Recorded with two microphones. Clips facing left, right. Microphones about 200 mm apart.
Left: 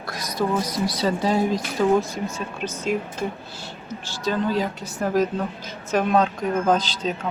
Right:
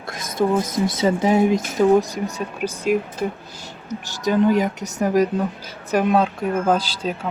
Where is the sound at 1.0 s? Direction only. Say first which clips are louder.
Right 5 dB; 20° right (ahead or behind).